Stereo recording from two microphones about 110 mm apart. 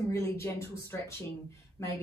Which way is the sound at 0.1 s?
25° left (ahead or behind).